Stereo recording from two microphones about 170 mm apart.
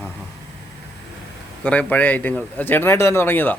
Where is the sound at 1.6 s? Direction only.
10° left (ahead or behind).